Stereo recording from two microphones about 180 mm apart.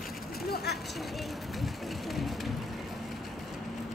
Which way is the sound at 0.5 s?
60° left (ahead or behind).